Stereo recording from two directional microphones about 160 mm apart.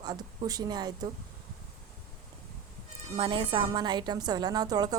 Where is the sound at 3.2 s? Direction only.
30° right (ahead or behind).